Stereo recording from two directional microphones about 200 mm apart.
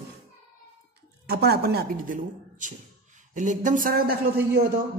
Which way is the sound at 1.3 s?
55° right (ahead or behind).